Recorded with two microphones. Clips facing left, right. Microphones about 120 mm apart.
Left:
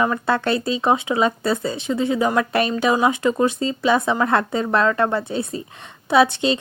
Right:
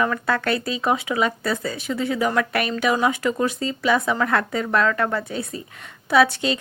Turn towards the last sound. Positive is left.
turn(degrees=25)  # may be behind; listen again after turning